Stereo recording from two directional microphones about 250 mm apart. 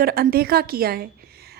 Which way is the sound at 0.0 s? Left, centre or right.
Right.